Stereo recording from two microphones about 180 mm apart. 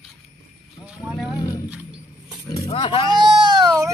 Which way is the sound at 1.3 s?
20° left (ahead or behind).